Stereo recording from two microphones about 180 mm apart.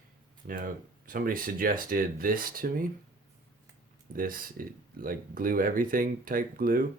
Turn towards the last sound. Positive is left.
turn(degrees=-50)  # may be behind; listen again after turning